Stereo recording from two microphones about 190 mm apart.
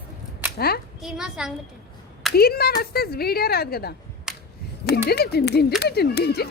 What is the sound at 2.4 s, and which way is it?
Speech, 55° left (ahead or behind).